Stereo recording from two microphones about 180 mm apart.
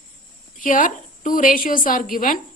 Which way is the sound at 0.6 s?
45° left (ahead or behind).